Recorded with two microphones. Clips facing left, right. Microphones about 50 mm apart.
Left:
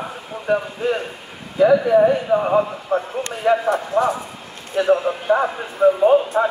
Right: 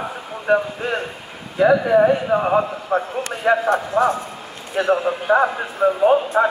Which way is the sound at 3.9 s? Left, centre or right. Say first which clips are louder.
Right 1 dB; centre.